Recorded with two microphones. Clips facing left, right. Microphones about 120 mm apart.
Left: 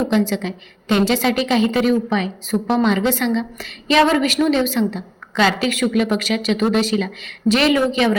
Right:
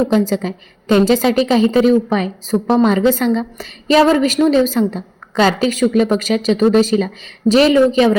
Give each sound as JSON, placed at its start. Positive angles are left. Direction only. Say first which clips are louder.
{"t": 0.1, "sound": "a woman's voice", "louder": "right 3 dB", "side_deg": -40}